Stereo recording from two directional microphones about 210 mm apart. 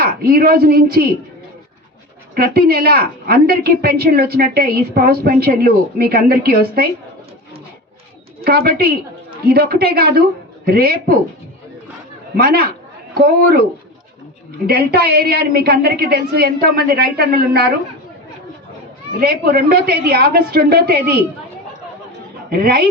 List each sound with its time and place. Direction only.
0.0 s a woman's voice: 45° right (ahead or behind)
2.3 s a woman's voice: 45° right (ahead or behind)
8.4 s a woman's voice: 45° right (ahead or behind)
12.4 s a woman's voice: 45° right (ahead or behind)
14.7 s a woman's voice: 50° right (ahead or behind)
19.2 s a woman's voice: 45° right (ahead or behind)
22.4 s a woman's voice: 45° right (ahead or behind)